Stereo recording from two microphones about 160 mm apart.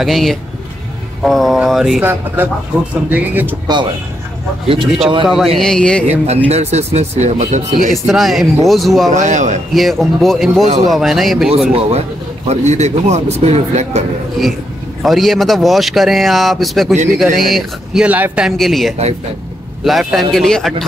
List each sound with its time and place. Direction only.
0.0 s speech: centre (ahead or behind)
3.1 s speech: 10° right (ahead or behind)
3.6 s a man's voice: 25° right (ahead or behind)
5.2 s speech: centre (ahead or behind)
6.0 s speech: 40° right (ahead or behind)
7.9 s speech: centre (ahead or behind)
9.1 s speech: 50° right (ahead or behind)
9.8 s speech: centre (ahead or behind)
12.4 s speech: 45° right (ahead or behind)
15.0 s speech: centre (ahead or behind)
16.9 s speech: 45° right (ahead or behind)
17.2 s speech: centre (ahead or behind)